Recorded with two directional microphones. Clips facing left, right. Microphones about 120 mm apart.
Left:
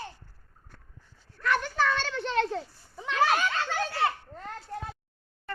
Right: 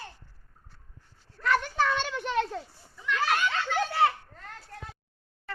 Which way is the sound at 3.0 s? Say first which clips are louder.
Left 3 dB; 35° left (ahead or behind).